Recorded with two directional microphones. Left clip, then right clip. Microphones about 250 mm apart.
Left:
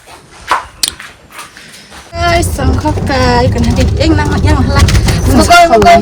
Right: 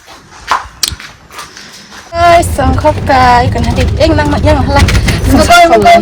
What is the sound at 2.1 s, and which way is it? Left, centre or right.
Speech, centre.